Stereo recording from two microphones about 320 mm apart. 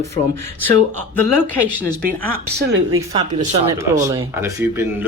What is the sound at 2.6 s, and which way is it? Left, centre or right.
Speech, right.